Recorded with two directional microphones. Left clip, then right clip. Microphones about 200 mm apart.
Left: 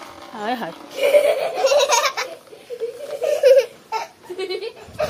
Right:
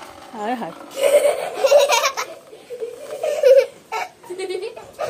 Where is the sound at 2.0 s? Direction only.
45° right (ahead or behind).